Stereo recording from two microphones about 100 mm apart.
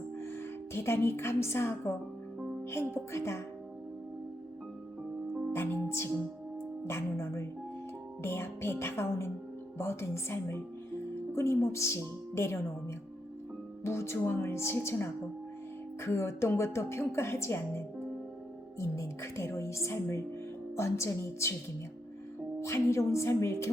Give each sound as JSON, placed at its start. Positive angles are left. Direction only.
{"t": 0.2, "sound": "a woman's voice", "side_deg": 25}
{"t": 5.5, "sound": "music", "side_deg": 25}
{"t": 6.8, "sound": "a woman's voice", "side_deg": 25}
{"t": 13.8, "sound": "a woman's voice", "side_deg": 25}
{"t": 22.6, "sound": "a woman's voice", "side_deg": 30}